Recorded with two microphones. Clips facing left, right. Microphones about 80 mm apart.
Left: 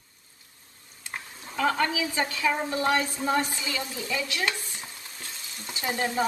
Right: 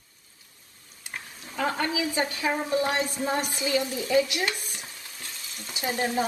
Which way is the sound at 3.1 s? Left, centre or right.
Left.